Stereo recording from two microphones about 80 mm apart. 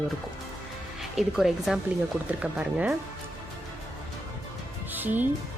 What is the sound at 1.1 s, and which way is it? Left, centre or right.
Speech, centre.